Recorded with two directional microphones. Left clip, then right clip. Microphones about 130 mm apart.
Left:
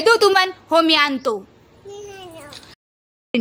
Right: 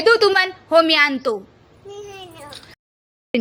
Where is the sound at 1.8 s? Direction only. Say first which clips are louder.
Even; centre (ahead or behind).